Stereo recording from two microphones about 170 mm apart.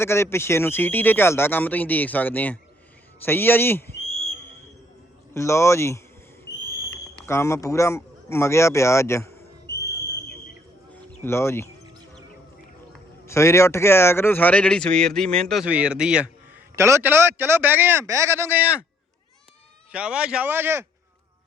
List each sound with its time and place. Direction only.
0.0 s speech: 15° left (ahead or behind)
5.3 s speech: 15° left (ahead or behind)
7.3 s speech: 15° left (ahead or behind)
10.9 s a sound: 15° left (ahead or behind)
13.2 s a man's voice: 15° left (ahead or behind); by 18.8 s 10° right (ahead or behind)
19.9 s a man's voice: 5° right (ahead or behind)